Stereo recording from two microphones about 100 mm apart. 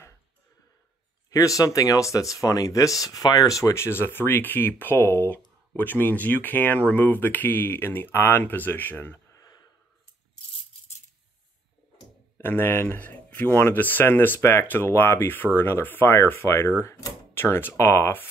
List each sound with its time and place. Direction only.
1.3 s speech: 35° left (ahead or behind)
9.3 s a sound: 40° left (ahead or behind)
12.4 s speech: 20° left (ahead or behind)